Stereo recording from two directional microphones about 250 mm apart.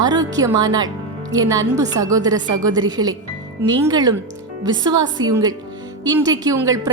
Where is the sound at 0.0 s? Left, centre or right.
Centre.